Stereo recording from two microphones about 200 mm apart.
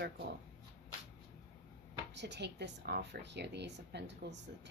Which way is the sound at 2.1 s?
60° right (ahead or behind).